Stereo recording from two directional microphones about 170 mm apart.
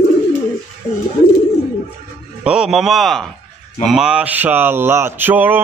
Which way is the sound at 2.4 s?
5° right (ahead or behind).